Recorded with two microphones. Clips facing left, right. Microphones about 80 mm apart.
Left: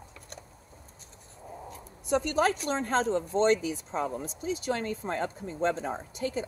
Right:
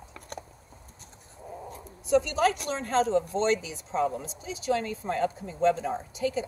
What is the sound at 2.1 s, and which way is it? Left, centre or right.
A woman's voice, left.